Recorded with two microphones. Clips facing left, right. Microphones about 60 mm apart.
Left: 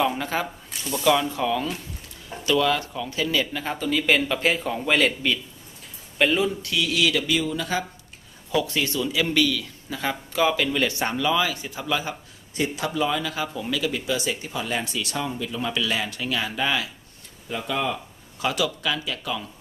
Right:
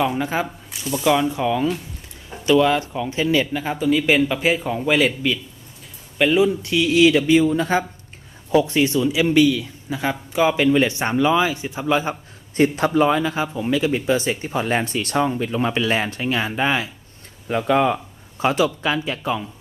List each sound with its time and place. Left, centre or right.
0.0 s speech: centre
1.0 s speech: centre
6.4 s a man's voice: right
12.5 s speech: right
17.5 s speech: right